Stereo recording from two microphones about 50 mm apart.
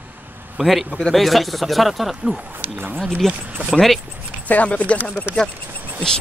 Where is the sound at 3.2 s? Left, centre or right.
Centre.